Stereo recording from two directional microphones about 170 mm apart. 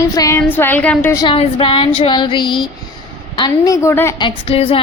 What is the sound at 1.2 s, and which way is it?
A woman's voice, 30° left (ahead or behind).